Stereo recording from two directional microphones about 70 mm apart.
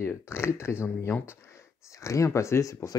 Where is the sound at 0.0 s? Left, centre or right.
Left.